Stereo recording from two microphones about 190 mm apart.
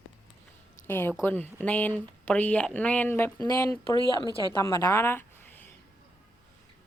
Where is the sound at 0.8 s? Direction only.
10° left (ahead or behind).